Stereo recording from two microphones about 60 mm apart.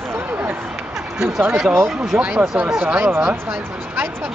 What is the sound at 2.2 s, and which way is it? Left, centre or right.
Speech, right.